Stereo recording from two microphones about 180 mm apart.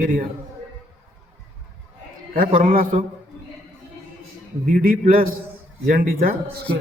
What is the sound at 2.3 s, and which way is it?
Speech, 50° right (ahead or behind).